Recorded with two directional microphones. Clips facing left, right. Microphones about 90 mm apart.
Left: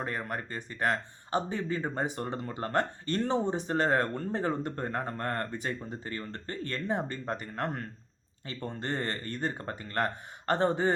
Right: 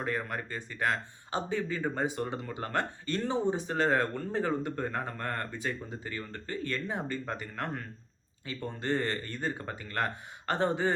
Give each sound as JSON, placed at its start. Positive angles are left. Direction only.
{"t": 0.0, "sound": "speech", "side_deg": 35}